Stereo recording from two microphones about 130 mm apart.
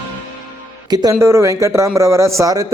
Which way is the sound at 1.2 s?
20° right (ahead or behind).